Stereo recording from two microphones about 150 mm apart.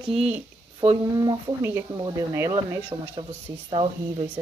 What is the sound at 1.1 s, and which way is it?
Speech, 25° right (ahead or behind).